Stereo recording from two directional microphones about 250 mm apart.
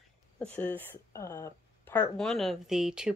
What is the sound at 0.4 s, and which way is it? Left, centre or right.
Speech, centre.